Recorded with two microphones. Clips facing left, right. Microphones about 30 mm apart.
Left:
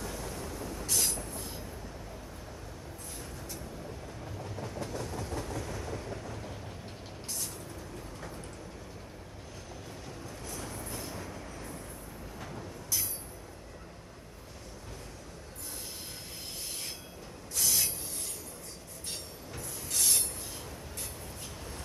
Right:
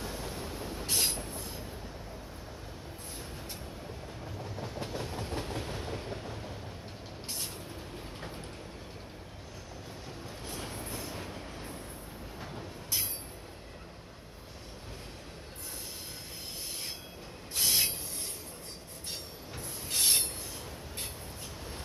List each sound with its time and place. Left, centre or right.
0.0 s train: right
4.6 s train: right
10.4 s train: right
10.9 s train: centre
11.1 s train: right
12.4 s train: centre
17.6 s train: right
19.9 s train: right